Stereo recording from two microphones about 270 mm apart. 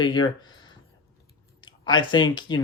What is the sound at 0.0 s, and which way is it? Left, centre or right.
Speech, centre.